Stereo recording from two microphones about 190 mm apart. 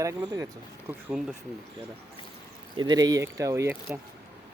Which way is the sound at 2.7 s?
20° right (ahead or behind).